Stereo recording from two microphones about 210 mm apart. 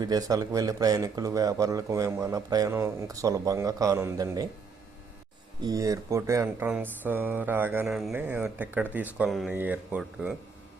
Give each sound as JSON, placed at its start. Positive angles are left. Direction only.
{"t": 0.0, "sound": "speech", "side_deg": -15}
{"t": 5.6, "sound": "speech", "side_deg": -15}